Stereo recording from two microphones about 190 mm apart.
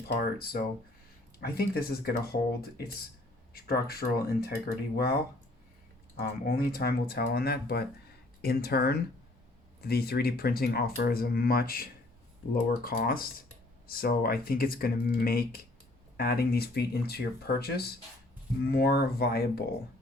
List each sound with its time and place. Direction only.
0.1 s speech: 50° left (ahead or behind)
6.1 s speech: 55° left (ahead or behind)